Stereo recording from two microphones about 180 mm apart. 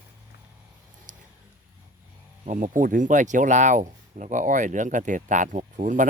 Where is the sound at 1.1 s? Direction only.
45° right (ahead or behind).